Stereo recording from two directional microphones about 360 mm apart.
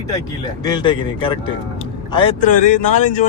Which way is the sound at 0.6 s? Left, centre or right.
Centre.